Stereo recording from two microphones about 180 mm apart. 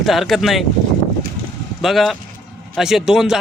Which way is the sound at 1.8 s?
Centre (ahead or behind).